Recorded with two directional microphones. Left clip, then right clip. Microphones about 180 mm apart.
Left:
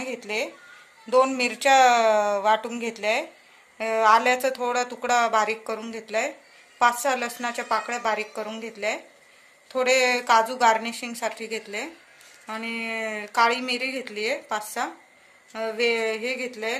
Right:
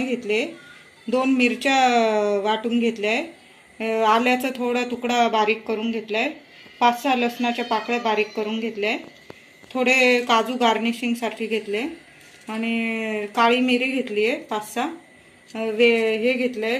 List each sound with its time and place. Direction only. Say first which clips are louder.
0.0 s a woman's voice: right 5 dB; 65° left (ahead or behind)
5.2 s a woman's voice: right 3 dB; 80° left